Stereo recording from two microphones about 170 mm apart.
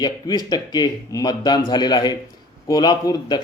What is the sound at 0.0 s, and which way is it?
Speech, 25° left (ahead or behind).